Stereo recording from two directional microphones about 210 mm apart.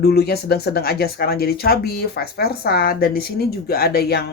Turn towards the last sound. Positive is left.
turn(degrees=50)  # may be behind; listen again after turning